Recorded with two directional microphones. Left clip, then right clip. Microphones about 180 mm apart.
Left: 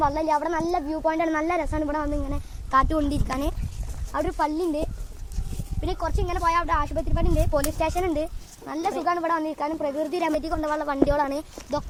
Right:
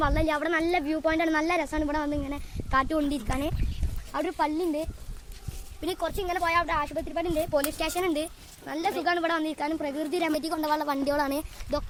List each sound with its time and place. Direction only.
0.0 s speech: 45° right (ahead or behind); by 3.5 s 25° right (ahead or behind)
4.1 s speech: 45° right (ahead or behind); by 4.8 s 30° right (ahead or behind)
5.8 s speech: 55° right (ahead or behind)
6.1 s speech: 35° right (ahead or behind)
7.8 s speech: 50° right (ahead or behind)
8.6 s speech: 35° right (ahead or behind)
9.0 s speech: 60° right (ahead or behind)
10.4 s a woman's voice: 60° right (ahead or behind)